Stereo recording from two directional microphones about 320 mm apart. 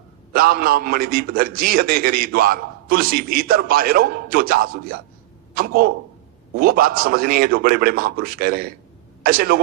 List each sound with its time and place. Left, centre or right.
0.3 s a man's voice: right